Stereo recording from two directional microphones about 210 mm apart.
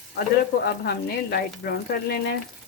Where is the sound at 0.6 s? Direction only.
50° left (ahead or behind).